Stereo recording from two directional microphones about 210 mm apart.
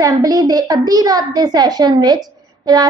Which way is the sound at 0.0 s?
15° right (ahead or behind).